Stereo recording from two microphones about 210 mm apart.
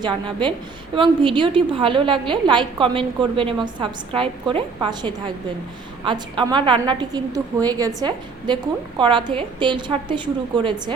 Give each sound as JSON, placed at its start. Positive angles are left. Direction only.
{"t": 0.0, "sound": "a woman's voice", "side_deg": -20}